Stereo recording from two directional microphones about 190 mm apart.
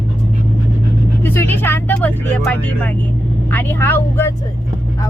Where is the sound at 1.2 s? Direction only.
10° left (ahead or behind).